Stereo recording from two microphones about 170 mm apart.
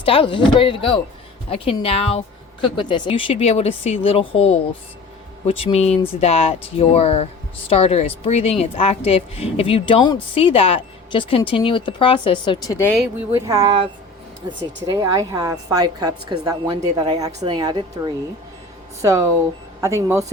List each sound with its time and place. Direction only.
0.0 s a woman's voice: 30° left (ahead or behind)
12.7 s speech: 15° left (ahead or behind)
13.0 s speech: 10° right (ahead or behind)
14.8 s a woman's voice: 20° right (ahead or behind)